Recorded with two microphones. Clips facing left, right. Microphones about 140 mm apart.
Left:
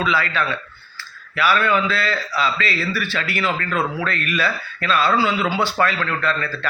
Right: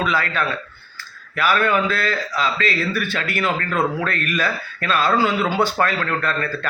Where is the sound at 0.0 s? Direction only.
45° right (ahead or behind).